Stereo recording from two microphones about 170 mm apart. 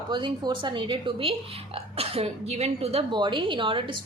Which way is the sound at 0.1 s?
25° right (ahead or behind).